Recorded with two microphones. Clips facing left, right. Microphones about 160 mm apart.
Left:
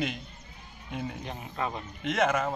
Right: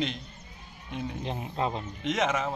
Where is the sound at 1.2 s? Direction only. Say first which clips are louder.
Right 3 dB; 25° right (ahead or behind).